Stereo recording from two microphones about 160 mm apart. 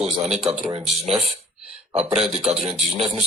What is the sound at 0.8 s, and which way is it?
Speech, centre (ahead or behind).